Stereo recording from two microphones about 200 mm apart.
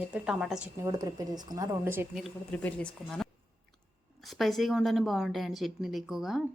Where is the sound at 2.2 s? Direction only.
5° left (ahead or behind).